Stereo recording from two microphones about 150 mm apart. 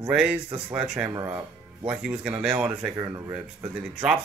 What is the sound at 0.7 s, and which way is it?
Speech, 5° right (ahead or behind).